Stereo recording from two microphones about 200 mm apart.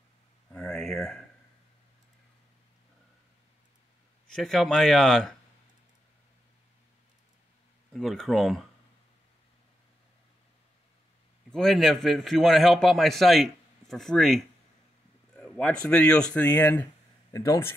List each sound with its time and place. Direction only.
0.5 s a sound: 5° left (ahead or behind)
4.3 s a man's voice: centre (ahead or behind)
7.9 s a man's voice: centre (ahead or behind)
11.5 s a man's voice: centre (ahead or behind)